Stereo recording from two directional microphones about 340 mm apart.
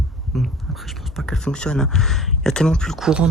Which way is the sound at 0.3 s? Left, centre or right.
Centre.